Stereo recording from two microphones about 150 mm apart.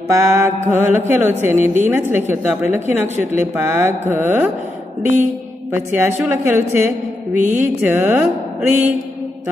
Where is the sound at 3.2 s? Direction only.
50° left (ahead or behind).